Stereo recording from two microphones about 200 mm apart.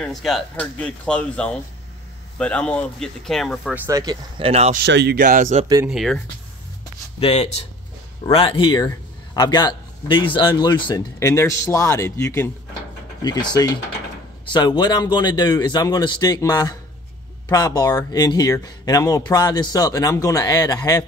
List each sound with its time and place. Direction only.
0.0 s speech: centre (ahead or behind)
3.8 s speech: 20° right (ahead or behind)
4.8 s speech: 55° right (ahead or behind); by 5.7 s 35° right (ahead or behind)
5.9 s speech: centre (ahead or behind)
7.2 s a man's voice: 30° left (ahead or behind)